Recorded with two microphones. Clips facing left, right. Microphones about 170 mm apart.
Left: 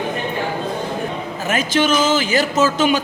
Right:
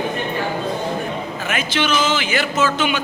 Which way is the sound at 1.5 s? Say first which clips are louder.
Left 4 dB; 40° left (ahead or behind).